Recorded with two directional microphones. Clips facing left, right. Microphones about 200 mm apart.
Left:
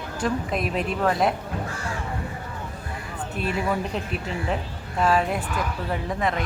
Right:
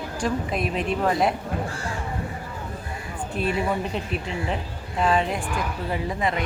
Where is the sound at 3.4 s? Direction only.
Centre (ahead or behind).